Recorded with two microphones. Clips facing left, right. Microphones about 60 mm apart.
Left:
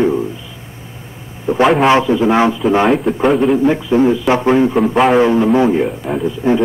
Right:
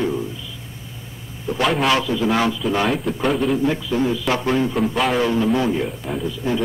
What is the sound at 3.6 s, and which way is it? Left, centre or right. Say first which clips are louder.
A man's voice: left 8 dB; left.